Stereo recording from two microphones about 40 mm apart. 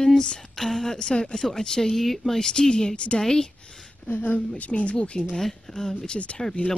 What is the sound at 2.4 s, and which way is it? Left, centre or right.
Speech, centre.